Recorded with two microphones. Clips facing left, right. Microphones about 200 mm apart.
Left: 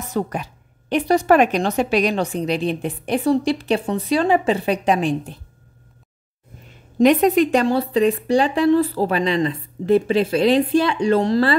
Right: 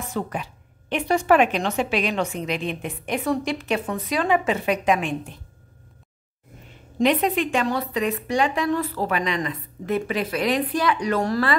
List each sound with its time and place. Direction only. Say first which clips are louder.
0.1 s a woman's voice: left 6 dB; 40° left (ahead or behind)
7.0 s a woman's voice: left 6 dB; 45° left (ahead or behind); by 11.5 s 25° left (ahead or behind)